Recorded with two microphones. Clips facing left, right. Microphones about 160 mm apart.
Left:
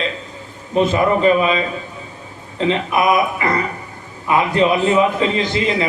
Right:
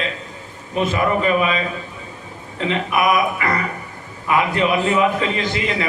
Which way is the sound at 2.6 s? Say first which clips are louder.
Left 3 dB; 25° left (ahead or behind).